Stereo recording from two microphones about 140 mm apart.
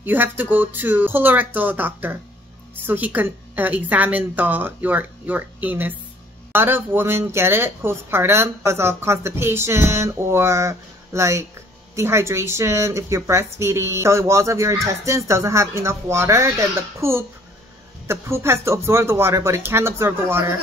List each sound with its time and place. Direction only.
0.0 s speech: 15° right (ahead or behind)